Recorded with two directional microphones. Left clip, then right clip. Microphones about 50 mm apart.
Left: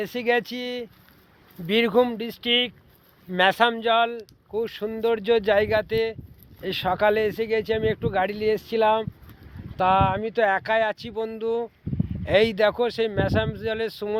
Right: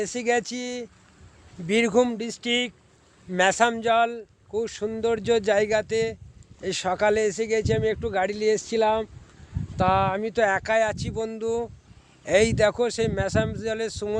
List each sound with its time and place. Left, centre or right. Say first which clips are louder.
0.0 s speech: left 1 dB; centre
2.1 s speech: left 3 dB; centre
6.6 s speech: left 1 dB; right
7.8 s speech: left 1 dB; centre
8.1 s speech: right 1 dB; right
9.7 s speech: left 2 dB; right
10.5 s speech: even; right; by 14.2 s centre